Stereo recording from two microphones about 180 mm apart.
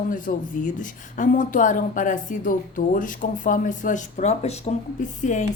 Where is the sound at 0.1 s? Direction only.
45° left (ahead or behind).